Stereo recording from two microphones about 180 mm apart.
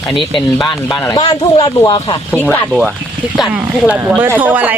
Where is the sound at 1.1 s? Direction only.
20° left (ahead or behind).